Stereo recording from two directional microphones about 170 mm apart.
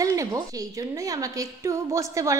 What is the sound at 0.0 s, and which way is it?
A woman's voice, 20° right (ahead or behind).